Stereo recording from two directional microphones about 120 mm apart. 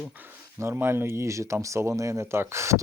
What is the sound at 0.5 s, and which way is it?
Speech, 20° right (ahead or behind).